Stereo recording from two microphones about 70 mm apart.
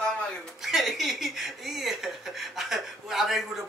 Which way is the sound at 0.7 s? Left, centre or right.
Centre.